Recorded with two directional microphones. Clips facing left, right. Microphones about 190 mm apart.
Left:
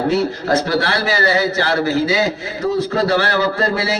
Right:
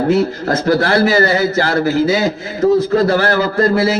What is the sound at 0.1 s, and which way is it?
A man's voice, 50° right (ahead or behind).